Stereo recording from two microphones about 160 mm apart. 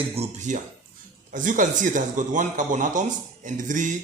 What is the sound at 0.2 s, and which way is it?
A man's voice, 50° right (ahead or behind).